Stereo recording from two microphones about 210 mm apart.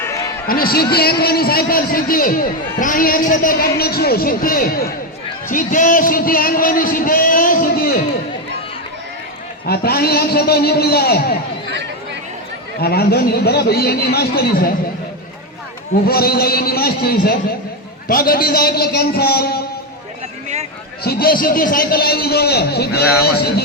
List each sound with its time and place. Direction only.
0.0 s a sound: 15° left (ahead or behind)
0.4 s a man's voice: 45° left (ahead or behind)
9.6 s a man's voice: 45° left (ahead or behind)
12.8 s a man's voice: 50° left (ahead or behind)
16.0 s a man's voice: 45° left (ahead or behind)
21.0 s a man's voice: 45° left (ahead or behind)